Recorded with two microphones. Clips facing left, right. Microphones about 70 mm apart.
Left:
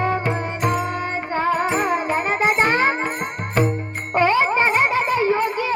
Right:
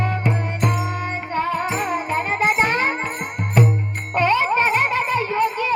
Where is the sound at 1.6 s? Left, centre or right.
Centre.